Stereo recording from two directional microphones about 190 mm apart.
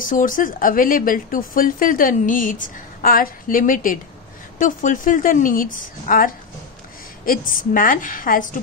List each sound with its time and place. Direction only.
0.0 s a woman's voice: 45° left (ahead or behind)
7.7 s a woman's voice: 45° left (ahead or behind)